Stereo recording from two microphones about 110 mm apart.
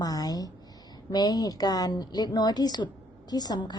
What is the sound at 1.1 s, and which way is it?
A woman's voice, 35° left (ahead or behind).